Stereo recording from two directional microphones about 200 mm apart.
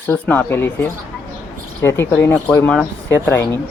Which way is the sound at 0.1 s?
10° left (ahead or behind).